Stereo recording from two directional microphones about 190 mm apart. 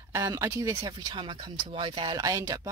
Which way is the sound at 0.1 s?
15° right (ahead or behind).